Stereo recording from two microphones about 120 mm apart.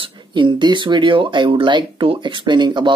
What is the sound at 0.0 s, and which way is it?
Speech, 40° right (ahead or behind).